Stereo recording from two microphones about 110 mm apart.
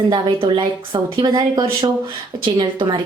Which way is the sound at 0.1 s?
50° right (ahead or behind).